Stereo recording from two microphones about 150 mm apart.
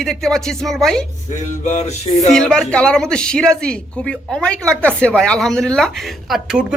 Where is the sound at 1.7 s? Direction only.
50° left (ahead or behind).